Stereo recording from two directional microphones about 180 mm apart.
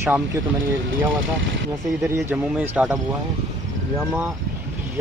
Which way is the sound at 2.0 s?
10° right (ahead or behind).